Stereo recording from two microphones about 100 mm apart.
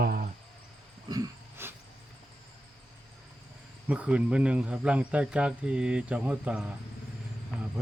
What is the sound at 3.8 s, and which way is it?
Speech, 15° right (ahead or behind).